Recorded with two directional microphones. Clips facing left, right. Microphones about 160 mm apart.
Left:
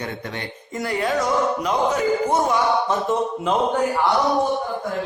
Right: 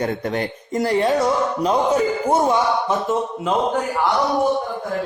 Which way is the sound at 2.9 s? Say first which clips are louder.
Even; 5° right (ahead or behind).